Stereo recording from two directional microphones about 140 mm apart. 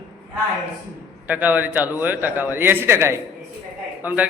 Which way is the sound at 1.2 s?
10° right (ahead or behind).